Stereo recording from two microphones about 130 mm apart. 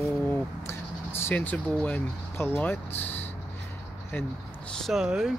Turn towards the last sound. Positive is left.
turn(degrees=-5)  # may be behind; listen again after turning